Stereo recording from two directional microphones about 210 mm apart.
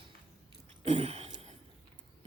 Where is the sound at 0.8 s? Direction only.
30° right (ahead or behind).